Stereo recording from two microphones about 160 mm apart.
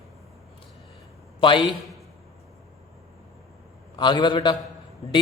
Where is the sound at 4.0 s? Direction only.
30° left (ahead or behind).